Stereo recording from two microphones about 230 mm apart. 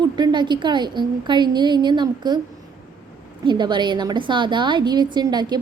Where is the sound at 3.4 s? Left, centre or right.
Centre.